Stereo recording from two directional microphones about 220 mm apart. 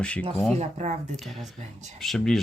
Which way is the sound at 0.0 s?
5° left (ahead or behind).